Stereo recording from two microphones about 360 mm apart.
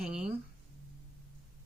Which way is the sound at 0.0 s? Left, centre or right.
Centre.